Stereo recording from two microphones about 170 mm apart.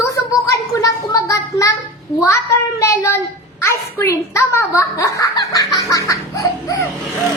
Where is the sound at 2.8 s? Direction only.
15° left (ahead or behind).